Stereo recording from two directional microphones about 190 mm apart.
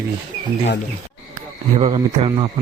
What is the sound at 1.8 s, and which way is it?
Speech, 30° right (ahead or behind).